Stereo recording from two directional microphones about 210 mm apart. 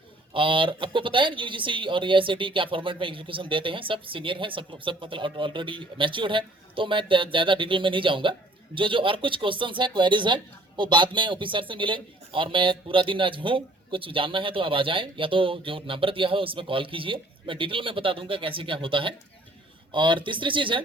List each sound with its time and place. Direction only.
0.3 s speech: 25° right (ahead or behind)